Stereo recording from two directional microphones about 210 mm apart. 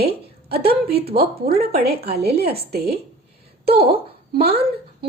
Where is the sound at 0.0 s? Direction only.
50° right (ahead or behind).